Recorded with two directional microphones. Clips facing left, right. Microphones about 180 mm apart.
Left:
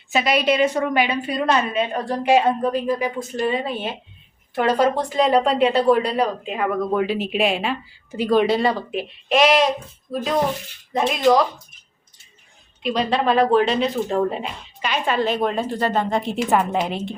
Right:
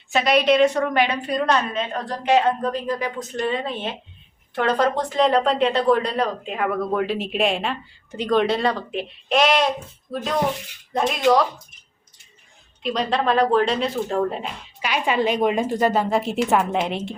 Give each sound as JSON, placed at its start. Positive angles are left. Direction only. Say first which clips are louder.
{"t": 0.1, "sound": "a woman's voice", "louder": "right 2 dB", "side_deg": 0}
{"t": 12.8, "sound": "speech", "louder": "left 2 dB", "side_deg": 0}
{"t": 14.8, "sound": "a woman's voice", "louder": "even", "side_deg": -10}